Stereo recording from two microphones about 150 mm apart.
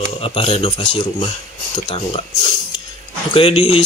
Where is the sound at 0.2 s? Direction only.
40° left (ahead or behind).